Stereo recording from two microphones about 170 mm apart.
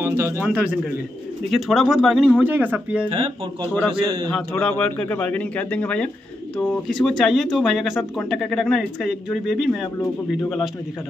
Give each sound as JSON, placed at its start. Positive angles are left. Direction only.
{"t": 0.0, "sound": "speech", "side_deg": -15}
{"t": 3.9, "sound": "a man's voice", "side_deg": -30}
{"t": 4.3, "sound": "speech", "side_deg": 5}